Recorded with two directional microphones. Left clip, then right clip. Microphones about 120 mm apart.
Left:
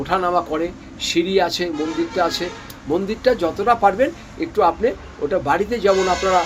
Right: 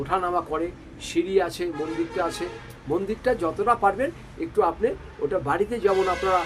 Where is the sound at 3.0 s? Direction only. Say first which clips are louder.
Left 7 dB; 30° right (ahead or behind).